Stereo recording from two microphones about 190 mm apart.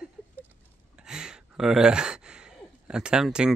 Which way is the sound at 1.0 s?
5° right (ahead or behind).